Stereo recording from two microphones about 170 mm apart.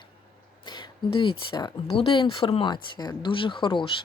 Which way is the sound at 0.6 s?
25° left (ahead or behind).